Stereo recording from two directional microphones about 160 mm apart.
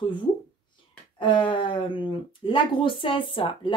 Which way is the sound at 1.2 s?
30° left (ahead or behind).